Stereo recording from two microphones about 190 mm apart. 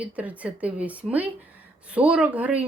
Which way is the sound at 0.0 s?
10° right (ahead or behind).